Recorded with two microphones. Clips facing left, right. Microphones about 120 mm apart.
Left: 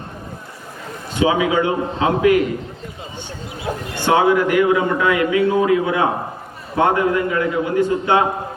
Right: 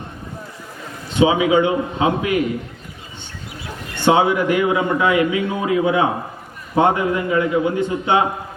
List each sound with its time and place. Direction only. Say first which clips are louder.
1.1 s a man's voice: right 2 dB; 20° right (ahead or behind)
3.7 s speech: left 10 dB; 45° left (ahead or behind)
4.0 s a man's voice: even; 20° right (ahead or behind)